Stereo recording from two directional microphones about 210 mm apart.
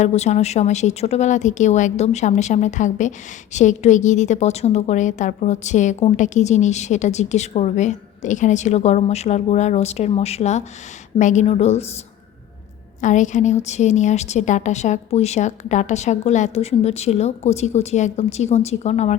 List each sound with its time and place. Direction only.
0.0 s a woman's voice: 30° left (ahead or behind)
13.0 s a woman's voice: 35° left (ahead or behind)